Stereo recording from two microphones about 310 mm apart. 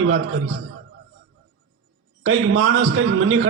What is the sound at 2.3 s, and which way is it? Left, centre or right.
A man's voice, right.